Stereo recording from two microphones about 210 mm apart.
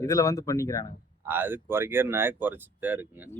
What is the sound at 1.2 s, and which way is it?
Speech, 10° right (ahead or behind).